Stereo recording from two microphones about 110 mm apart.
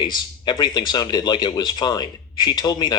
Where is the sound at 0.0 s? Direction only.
45° left (ahead or behind).